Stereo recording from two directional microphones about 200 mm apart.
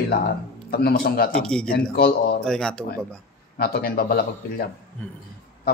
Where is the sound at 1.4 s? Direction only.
5° left (ahead or behind).